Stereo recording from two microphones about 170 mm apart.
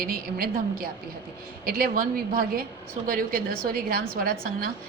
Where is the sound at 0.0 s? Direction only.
60° right (ahead or behind).